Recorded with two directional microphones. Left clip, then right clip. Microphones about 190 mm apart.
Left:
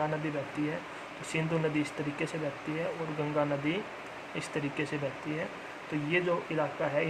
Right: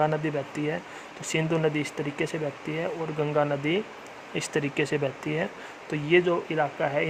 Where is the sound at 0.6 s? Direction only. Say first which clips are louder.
Right 4 dB; 60° right (ahead or behind).